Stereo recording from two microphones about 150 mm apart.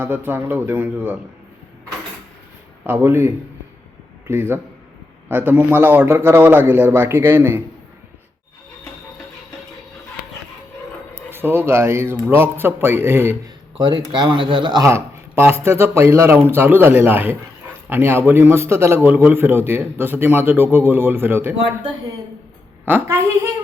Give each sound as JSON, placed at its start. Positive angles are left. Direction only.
{"t": 0.0, "sound": "a man's voice", "side_deg": -15}
{"t": 2.8, "sound": "a man's voice", "side_deg": -15}
{"t": 11.3, "sound": "a man's voice", "side_deg": -15}
{"t": 13.7, "sound": "speech", "side_deg": -30}
{"t": 14.8, "sound": "a man's voice", "side_deg": -15}
{"t": 22.9, "sound": "a man's voice", "side_deg": -15}